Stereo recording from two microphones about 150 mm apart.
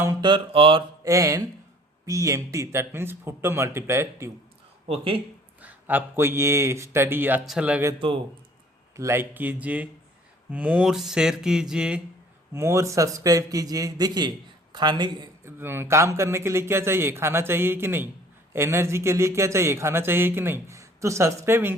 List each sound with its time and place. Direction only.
0.0 s a man's voice: 20° right (ahead or behind)
0.3 s mantra: 35° right (ahead or behind)
1.0 s a man's voice: 20° right (ahead or behind)
5.6 s speech: 10° right (ahead or behind)
7.9 s mantra: 40° right (ahead or behind)
9.0 s speech: 15° right (ahead or behind)
12.5 s a man's voice: 20° right (ahead or behind)
15.4 s speech: 15° right (ahead or behind)